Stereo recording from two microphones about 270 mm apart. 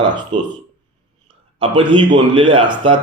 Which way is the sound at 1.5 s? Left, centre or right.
Centre.